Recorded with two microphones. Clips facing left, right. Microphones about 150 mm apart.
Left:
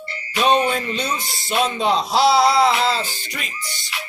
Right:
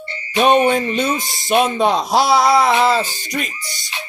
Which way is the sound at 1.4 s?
50° right (ahead or behind).